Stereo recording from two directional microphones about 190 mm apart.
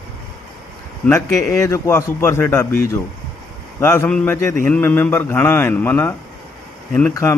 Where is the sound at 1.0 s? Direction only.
15° left (ahead or behind).